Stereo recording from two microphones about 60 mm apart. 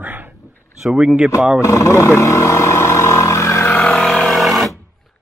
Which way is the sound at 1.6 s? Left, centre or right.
Left.